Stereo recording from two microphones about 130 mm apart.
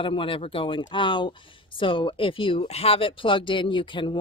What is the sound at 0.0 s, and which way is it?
Speech, 40° left (ahead or behind).